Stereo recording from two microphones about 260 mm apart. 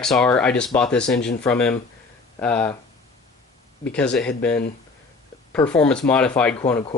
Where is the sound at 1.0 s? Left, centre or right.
Left.